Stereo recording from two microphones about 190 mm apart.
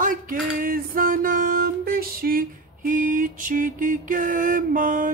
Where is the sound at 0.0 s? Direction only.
45° right (ahead or behind).